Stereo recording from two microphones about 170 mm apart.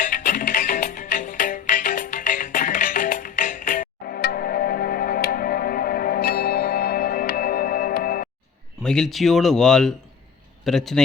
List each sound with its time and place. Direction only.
0.0 s music: 50° left (ahead or behind)
8.8 s a man's voice: 5° left (ahead or behind)